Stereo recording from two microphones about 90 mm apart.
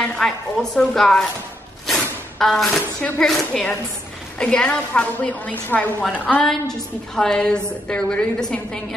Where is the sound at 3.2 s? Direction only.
5° left (ahead or behind).